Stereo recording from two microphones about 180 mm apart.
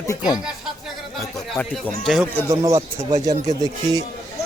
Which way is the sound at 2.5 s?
15° right (ahead or behind).